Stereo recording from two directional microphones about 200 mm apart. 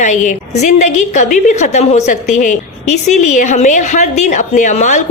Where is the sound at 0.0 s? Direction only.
40° left (ahead or behind).